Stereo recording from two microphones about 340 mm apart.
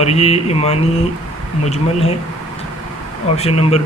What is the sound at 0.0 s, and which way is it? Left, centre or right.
Speech, centre.